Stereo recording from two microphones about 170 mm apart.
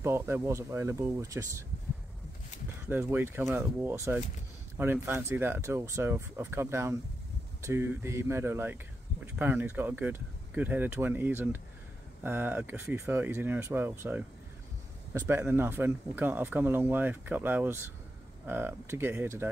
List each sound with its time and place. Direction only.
0.0 s speech: 15° right (ahead or behind)
2.9 s speech: 15° right (ahead or behind)